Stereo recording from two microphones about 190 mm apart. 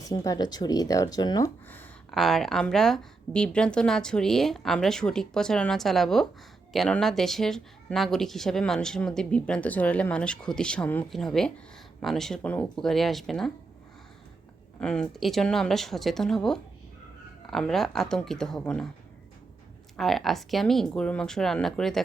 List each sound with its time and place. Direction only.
0.0 s speech: 20° left (ahead or behind)
1.6 s speech: 10° left (ahead or behind)
14.8 s speech: 5° left (ahead or behind)
20.0 s speech: centre (ahead or behind)